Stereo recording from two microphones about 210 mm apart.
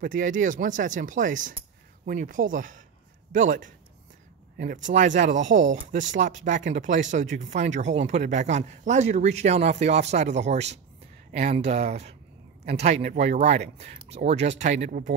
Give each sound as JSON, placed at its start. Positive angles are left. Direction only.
{"t": 0.0, "sound": "speech", "side_deg": -40}
{"t": 4.8, "sound": "speech", "side_deg": -35}